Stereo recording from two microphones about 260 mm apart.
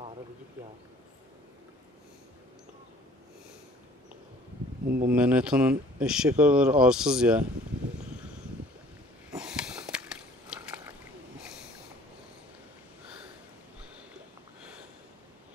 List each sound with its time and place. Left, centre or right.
4.8 s speech: right
5.1 s speech: centre
9.3 s sniff: centre
10.5 s a sound: centre